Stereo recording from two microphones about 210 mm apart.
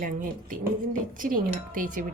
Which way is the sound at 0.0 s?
40° right (ahead or behind).